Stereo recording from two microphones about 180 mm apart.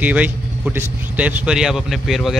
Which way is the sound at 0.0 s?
5° right (ahead or behind).